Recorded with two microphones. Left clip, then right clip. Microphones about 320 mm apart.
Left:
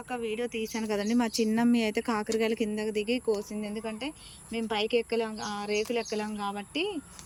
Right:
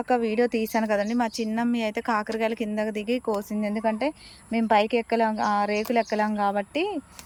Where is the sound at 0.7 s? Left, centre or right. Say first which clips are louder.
Right 6 dB; centre.